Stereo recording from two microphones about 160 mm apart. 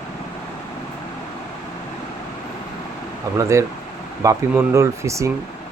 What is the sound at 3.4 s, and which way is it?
Speech, 20° right (ahead or behind).